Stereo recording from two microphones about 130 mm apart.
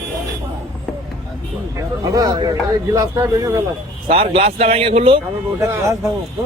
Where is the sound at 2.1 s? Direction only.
30° right (ahead or behind).